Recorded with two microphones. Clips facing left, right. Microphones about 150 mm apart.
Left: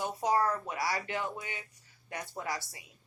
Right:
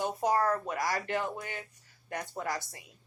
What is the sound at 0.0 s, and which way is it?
Speech, 50° right (ahead or behind).